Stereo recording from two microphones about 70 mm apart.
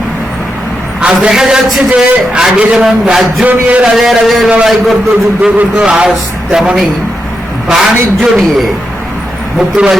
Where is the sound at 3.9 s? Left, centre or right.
Centre.